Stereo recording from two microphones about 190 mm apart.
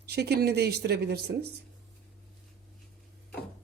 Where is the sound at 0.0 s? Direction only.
60° right (ahead or behind).